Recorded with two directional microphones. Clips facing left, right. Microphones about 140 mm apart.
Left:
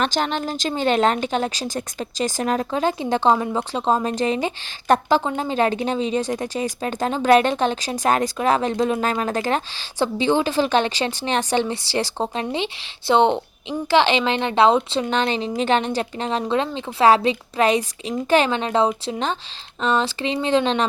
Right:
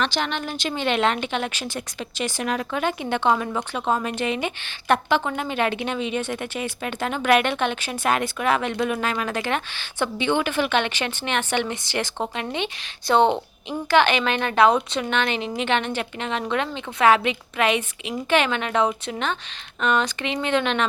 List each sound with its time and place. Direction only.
0.0 s speech: 45° left (ahead or behind)